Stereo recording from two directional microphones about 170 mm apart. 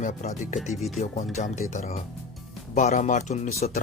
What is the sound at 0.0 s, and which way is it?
Speech, 45° left (ahead or behind).